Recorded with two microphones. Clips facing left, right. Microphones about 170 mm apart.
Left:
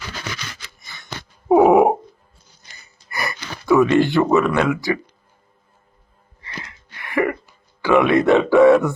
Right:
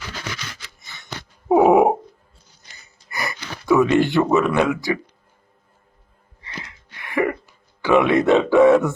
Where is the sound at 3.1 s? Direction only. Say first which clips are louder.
Left 1 dB; 20° right (ahead or behind).